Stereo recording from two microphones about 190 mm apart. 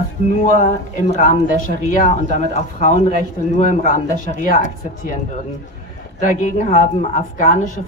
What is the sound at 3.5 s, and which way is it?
A woman's voice, 40° left (ahead or behind).